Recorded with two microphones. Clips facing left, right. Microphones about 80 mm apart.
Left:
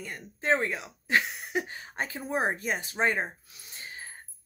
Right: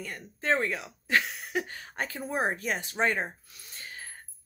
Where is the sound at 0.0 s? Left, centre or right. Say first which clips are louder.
Left 1 dB; centre.